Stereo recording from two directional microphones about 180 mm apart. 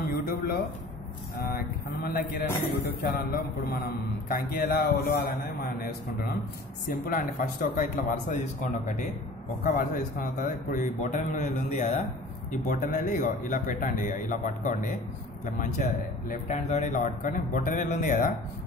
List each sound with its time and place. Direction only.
0.0 s a sound: 55° left (ahead or behind)
2.0 s a man's voice: 55° left (ahead or behind)
9.6 s speech: 50° left (ahead or behind)
16.3 s speech: 40° left (ahead or behind)